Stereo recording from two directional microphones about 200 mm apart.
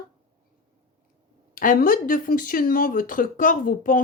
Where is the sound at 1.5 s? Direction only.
45° left (ahead or behind).